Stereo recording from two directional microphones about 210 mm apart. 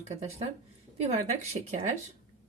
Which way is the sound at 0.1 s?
30° right (ahead or behind).